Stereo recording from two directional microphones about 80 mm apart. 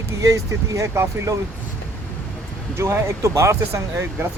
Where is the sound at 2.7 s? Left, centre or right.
Right.